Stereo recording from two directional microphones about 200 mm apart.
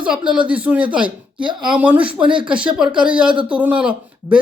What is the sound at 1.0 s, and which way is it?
Speech, 25° right (ahead or behind).